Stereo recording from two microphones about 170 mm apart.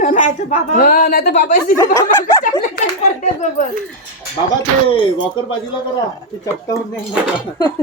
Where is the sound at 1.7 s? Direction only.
20° left (ahead or behind).